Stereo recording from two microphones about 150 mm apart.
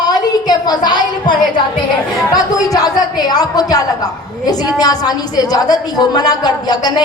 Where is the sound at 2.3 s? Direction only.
25° left (ahead or behind).